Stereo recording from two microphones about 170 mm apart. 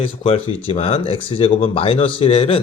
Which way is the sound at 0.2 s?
35° left (ahead or behind).